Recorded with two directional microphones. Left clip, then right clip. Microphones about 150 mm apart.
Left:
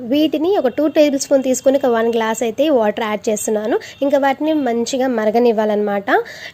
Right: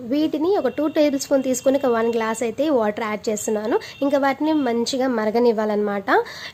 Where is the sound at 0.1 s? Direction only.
20° left (ahead or behind).